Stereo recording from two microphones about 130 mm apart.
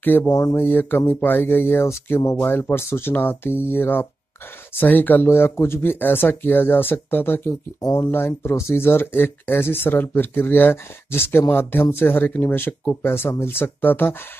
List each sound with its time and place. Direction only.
0.3 s speech: 25° left (ahead or behind)